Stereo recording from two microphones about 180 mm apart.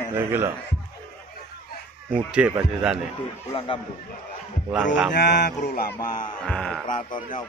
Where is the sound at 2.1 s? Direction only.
5° right (ahead or behind).